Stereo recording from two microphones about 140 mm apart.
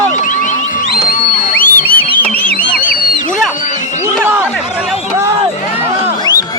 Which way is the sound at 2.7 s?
90° left.